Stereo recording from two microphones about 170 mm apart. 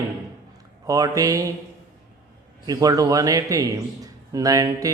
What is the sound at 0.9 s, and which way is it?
Speech, 20° right (ahead or behind).